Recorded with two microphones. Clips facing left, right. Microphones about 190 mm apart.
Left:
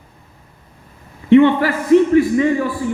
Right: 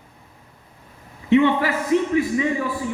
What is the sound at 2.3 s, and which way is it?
Speech, 55° left (ahead or behind).